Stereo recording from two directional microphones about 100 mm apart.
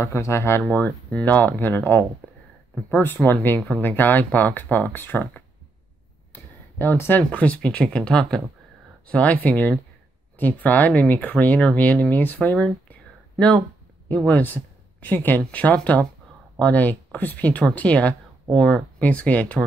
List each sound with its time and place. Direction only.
0.0 s speech: 25° left (ahead or behind); by 12.7 s 10° left (ahead or behind)
14.0 s speech: 15° left (ahead or behind)